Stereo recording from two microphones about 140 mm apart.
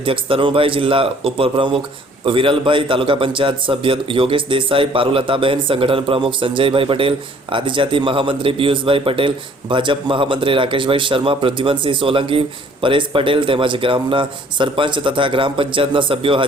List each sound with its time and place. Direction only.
0.0 s a man's voice: 40° right (ahead or behind)